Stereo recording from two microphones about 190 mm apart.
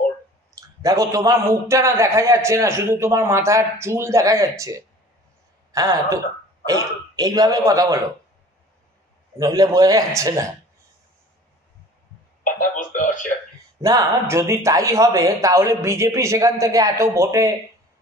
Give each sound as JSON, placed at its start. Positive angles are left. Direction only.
{"t": 0.6, "sound": "a man's voice", "side_deg": -20}
{"t": 9.4, "sound": "a man's voice", "side_deg": -20}
{"t": 12.4, "sound": "a sound", "side_deg": 45}
{"t": 13.7, "sound": "a man's voice", "side_deg": -15}